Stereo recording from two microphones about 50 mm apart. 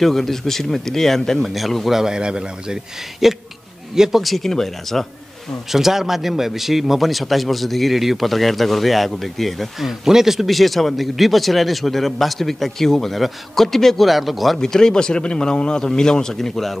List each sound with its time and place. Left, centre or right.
0.0 s speech: centre
1.9 s a man's voice: centre
3.2 s a man's voice: centre
4.2 s a man's voice: centre
5.7 s a man's voice: centre
14.6 s speech: centre